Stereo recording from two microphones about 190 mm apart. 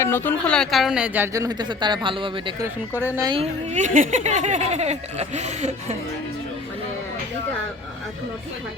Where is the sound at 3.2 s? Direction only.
30° right (ahead or behind).